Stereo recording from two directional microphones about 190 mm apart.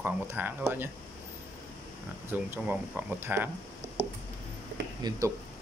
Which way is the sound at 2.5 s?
10° right (ahead or behind).